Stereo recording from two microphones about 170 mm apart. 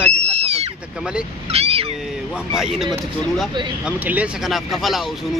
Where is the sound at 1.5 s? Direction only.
35° right (ahead or behind).